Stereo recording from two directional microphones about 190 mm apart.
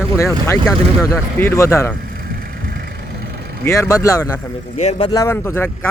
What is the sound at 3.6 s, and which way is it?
Speech, 15° left (ahead or behind).